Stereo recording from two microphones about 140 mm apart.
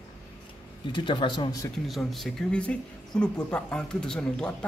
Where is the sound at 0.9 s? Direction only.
35° left (ahead or behind).